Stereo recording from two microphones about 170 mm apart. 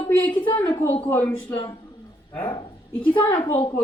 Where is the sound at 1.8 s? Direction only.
25° left (ahead or behind).